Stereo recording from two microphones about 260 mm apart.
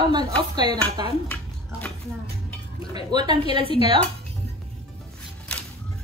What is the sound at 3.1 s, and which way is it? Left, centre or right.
Speech, centre.